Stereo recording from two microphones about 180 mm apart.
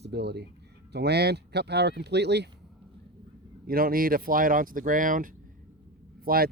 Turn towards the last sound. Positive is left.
turn(degrees=-55)  # may be behind; listen again after turning